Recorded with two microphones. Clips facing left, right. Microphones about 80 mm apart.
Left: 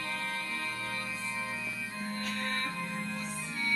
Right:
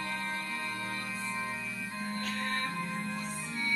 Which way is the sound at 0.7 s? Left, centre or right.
Right.